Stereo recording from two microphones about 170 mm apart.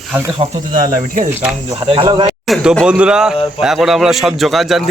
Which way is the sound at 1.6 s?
30° right (ahead or behind).